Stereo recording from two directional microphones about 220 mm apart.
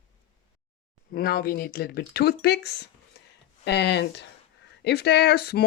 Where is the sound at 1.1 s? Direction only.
45° left (ahead or behind).